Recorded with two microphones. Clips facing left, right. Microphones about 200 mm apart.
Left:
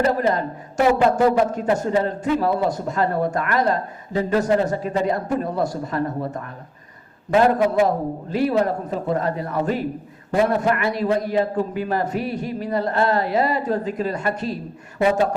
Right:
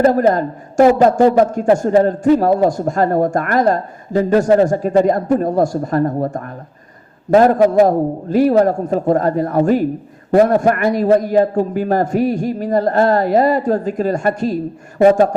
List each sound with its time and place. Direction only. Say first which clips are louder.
0.0 s a man's voice: right 7 dB; 45° right (ahead or behind)